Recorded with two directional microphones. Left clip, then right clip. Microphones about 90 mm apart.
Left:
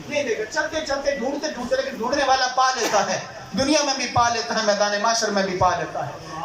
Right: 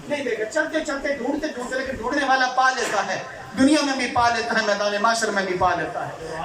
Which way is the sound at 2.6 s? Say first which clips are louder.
Left 1 dB; 20° left (ahead or behind).